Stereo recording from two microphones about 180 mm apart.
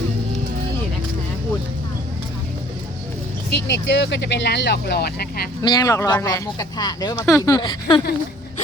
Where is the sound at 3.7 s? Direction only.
80° left; by 5.5 s 60° left (ahead or behind).